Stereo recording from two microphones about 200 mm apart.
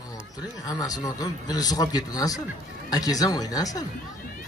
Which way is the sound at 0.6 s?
20° left (ahead or behind).